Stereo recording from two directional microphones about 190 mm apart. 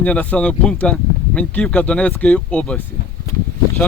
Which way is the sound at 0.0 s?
5° left (ahead or behind).